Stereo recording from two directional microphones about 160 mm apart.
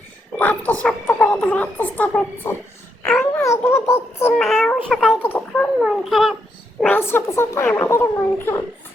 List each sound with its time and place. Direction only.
0.3 s a child's voice: 10° left (ahead or behind)
3.4 s speech: 15° left (ahead or behind)
4.4 s a child's voice: centre (ahead or behind)
5.2 s speech: 10° left (ahead or behind)
5.8 s a child's voice: centre (ahead or behind)
6.8 s speech: 15° left (ahead or behind)